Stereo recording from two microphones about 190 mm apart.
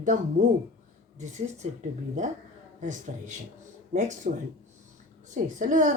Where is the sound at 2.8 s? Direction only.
40° right (ahead or behind).